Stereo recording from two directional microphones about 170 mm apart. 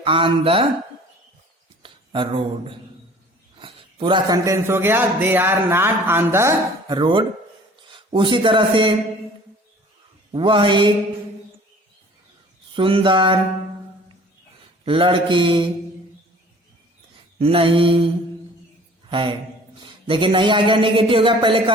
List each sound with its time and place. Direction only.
0.0 s mantra: 30° right (ahead or behind)
1.8 s a man's voice: 30° right (ahead or behind)
10.3 s a man's voice: 30° right (ahead or behind)
12.7 s a man's voice: 30° right (ahead or behind)
14.8 s a man's voice: 30° right (ahead or behind)
17.3 s mantra: 30° right (ahead or behind)
19.1 s a man's voice: 30° right (ahead or behind)